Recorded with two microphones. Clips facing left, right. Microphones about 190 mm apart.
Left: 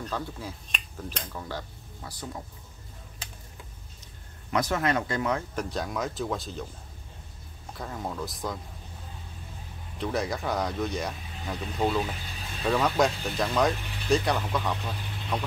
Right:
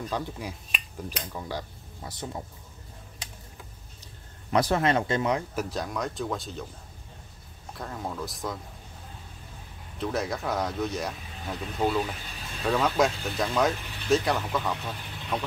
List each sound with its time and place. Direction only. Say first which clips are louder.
0.0 s speech: right 2 dB; 15° right (ahead or behind)
2.0 s speech: right 2 dB; 25° right (ahead or behind)
4.5 s speech: right 3 dB; 30° right (ahead or behind)
5.6 s speech: even; centre (ahead or behind)
7.7 s speech: even; centre (ahead or behind)
9.9 s speech: even; centre (ahead or behind)